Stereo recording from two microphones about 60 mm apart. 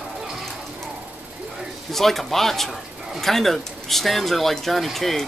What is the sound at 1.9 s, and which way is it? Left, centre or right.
Speech, centre.